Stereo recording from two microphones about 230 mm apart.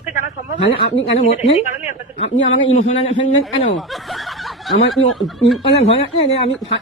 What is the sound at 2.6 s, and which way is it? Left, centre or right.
Speech, left.